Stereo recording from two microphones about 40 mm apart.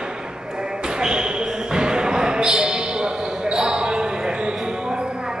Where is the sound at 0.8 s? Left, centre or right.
Centre.